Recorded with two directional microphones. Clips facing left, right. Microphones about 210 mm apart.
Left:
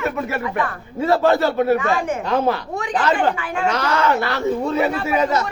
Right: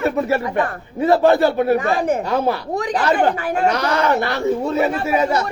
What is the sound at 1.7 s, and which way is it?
Speech, 35° right (ahead or behind).